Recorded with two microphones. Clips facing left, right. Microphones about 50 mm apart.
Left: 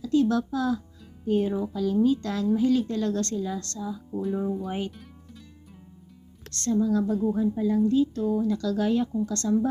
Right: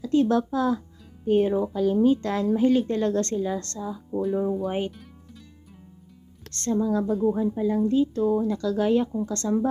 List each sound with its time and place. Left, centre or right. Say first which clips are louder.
0.0 s a woman's voice: right 2 dB; right
4.2 s speech: right 4 dB; centre
4.9 s music: right 1 dB; centre
6.5 s speech: even; right